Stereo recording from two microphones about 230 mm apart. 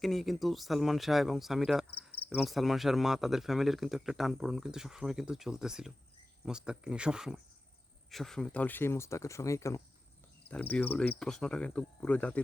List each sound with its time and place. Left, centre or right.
0.0 s speech: centre
8.1 s cricket: centre